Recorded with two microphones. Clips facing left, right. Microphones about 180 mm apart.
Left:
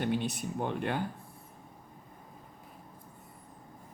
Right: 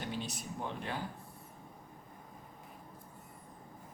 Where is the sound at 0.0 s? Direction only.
60° left (ahead or behind).